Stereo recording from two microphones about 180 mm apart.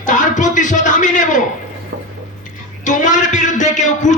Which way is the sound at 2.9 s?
45° left (ahead or behind).